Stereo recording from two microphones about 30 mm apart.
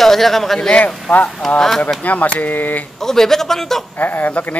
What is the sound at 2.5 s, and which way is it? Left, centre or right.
Speech, left.